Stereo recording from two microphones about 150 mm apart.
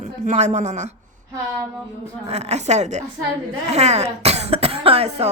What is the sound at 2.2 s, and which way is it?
Speech, 45° right (ahead or behind).